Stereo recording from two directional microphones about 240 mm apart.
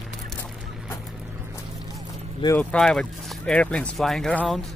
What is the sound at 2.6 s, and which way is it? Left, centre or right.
Speech, centre.